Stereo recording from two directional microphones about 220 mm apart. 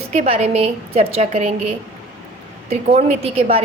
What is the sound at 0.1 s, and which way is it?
A woman's voice, 30° right (ahead or behind).